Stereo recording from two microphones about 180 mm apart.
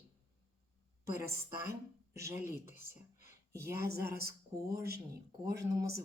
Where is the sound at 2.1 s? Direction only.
15° right (ahead or behind).